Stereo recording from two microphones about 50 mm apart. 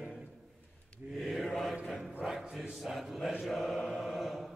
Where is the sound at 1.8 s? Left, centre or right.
Centre.